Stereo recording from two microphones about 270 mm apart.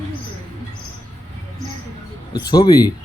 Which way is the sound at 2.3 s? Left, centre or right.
Centre.